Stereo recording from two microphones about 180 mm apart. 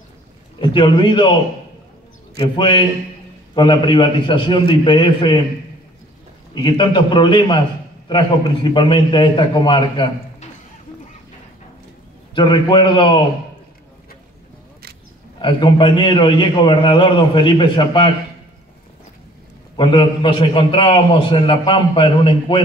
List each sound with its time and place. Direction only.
0.6 s a man's voice: 25° left (ahead or behind)
6.5 s a man's voice: 25° left (ahead or behind)
12.4 s a man's voice: 25° left (ahead or behind)
15.3 s a man's voice: 25° left (ahead or behind)
19.8 s a man's voice: 25° left (ahead or behind)